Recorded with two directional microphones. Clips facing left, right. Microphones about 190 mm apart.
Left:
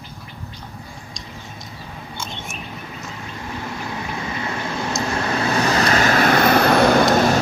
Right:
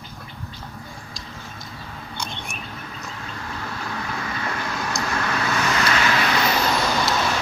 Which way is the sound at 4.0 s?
20° left (ahead or behind).